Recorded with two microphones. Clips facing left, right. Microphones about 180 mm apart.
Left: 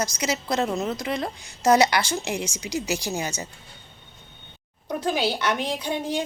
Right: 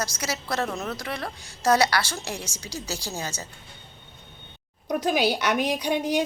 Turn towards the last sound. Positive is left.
turn(degrees=-15)  # may be behind; listen again after turning